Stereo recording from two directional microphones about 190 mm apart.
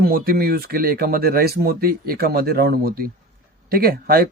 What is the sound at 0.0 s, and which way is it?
Speech, 50° right (ahead or behind).